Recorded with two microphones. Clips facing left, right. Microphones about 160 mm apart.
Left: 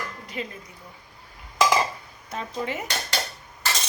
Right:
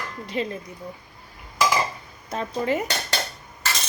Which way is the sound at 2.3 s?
40° right (ahead or behind).